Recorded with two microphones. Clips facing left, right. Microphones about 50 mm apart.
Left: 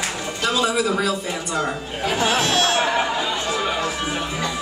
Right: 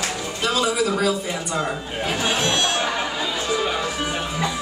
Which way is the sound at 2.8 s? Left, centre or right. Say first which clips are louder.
Left 4 dB; centre.